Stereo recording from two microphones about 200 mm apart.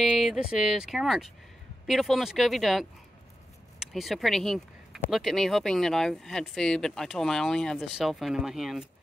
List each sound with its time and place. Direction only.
0.0 s speech: 5° right (ahead or behind)